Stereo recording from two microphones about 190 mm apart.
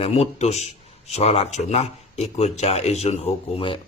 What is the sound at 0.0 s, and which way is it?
Speech, 35° left (ahead or behind).